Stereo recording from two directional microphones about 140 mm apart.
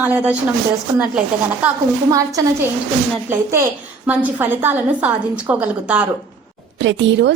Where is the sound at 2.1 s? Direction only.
25° right (ahead or behind).